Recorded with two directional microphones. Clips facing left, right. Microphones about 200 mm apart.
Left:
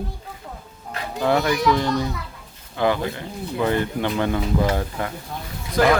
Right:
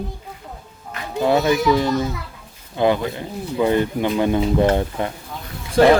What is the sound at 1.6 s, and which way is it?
Speech, centre (ahead or behind).